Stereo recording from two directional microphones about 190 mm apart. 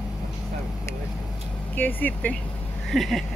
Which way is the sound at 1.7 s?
10° left (ahead or behind).